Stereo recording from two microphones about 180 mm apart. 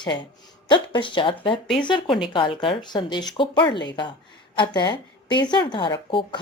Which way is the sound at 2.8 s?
25° left (ahead or behind).